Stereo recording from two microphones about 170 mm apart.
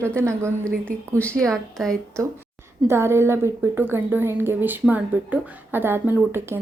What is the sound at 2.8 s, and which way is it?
A woman's voice, 15° right (ahead or behind).